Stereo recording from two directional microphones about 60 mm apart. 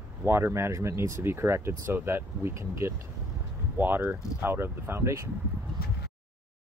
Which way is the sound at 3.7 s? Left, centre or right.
Right.